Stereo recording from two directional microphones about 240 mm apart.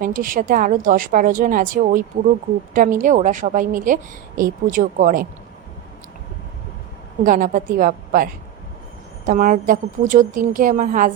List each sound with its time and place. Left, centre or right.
0.0 s a woman's voice: right
7.3 s a woman's voice: right